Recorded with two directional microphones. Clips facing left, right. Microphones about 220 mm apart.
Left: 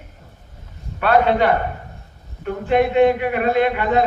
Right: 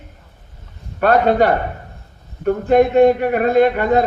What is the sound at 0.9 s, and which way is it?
A man's voice, 45° right (ahead or behind).